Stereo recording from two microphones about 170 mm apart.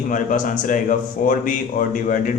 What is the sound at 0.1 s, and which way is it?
Speech, 50° left (ahead or behind).